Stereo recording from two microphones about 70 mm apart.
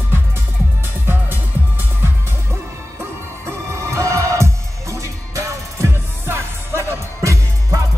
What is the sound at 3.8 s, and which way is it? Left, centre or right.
Music, right.